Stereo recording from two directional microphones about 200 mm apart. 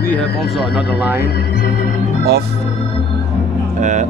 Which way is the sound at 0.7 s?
5° right (ahead or behind).